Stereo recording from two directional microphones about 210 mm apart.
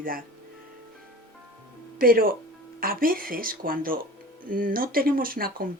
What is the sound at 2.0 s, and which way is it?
Speech, 45° right (ahead or behind).